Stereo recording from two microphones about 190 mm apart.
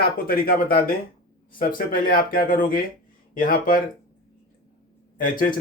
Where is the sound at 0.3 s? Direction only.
50° left (ahead or behind).